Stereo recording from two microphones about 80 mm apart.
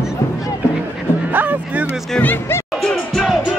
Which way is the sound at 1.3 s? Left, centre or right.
Right.